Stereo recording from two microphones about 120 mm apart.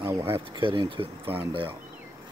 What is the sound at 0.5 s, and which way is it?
Speech, 45° right (ahead or behind).